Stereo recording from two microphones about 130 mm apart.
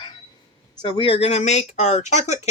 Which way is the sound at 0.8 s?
40° left (ahead or behind).